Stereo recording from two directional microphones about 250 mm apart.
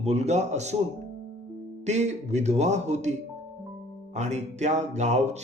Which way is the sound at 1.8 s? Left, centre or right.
Right.